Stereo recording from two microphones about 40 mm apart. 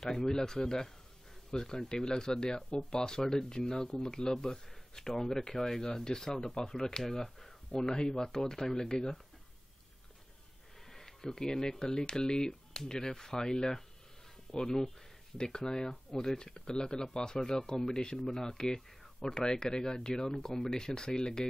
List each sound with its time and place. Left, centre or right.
0.0 s speech: centre
10.9 s speech: centre